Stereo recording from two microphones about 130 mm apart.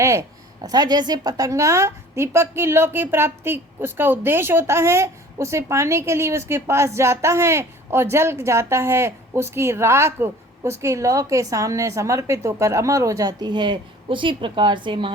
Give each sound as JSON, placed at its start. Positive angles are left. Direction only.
{"t": 0.0, "sound": "a woman's voice", "side_deg": -25}